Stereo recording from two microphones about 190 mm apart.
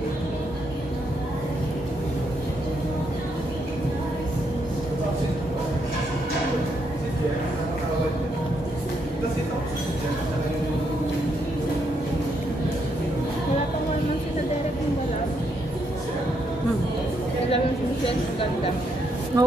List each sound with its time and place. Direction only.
19.3 s speech: 20° right (ahead or behind)